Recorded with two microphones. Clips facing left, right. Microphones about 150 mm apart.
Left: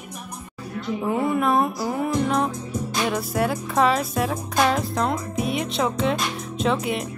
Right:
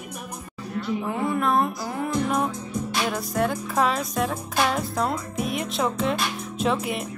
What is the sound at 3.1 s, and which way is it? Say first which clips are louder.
Speech: left 2 dB; 5° left (ahead or behind).